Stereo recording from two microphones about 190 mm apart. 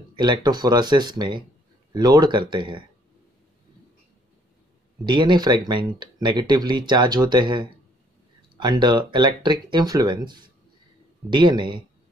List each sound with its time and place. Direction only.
0.1 s speech: 25° right (ahead or behind)
5.0 s speech: 25° right (ahead or behind)